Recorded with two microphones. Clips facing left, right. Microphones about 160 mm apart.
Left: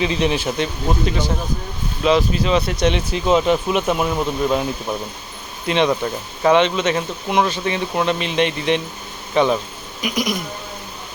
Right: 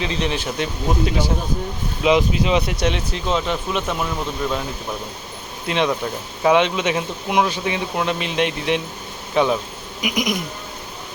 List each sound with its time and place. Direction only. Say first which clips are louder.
0.0 s speech: left 4 dB; 5° left (ahead or behind)
0.6 s speech: left 1 dB; 5° right (ahead or behind)
3.1 s speech: left 6 dB; 10° left (ahead or behind)
5.6 s speech: left 3 dB; centre (ahead or behind)
10.0 s speech: even; 15° right (ahead or behind)